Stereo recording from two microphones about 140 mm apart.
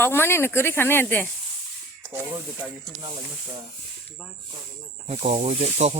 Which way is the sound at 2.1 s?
15° right (ahead or behind).